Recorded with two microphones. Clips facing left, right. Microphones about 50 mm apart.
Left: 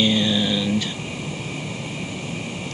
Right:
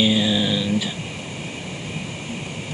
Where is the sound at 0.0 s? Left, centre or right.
Centre.